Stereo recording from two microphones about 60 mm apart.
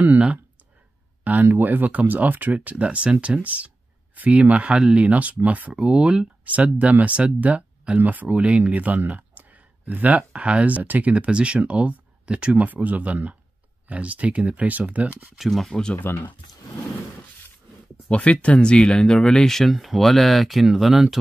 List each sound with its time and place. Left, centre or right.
1.2 s speech: right
5.9 s speech: centre
6.4 s speech: right
15.3 s speech: centre
15.7 s speech: centre
18.1 s speech: left; by 21.2 s centre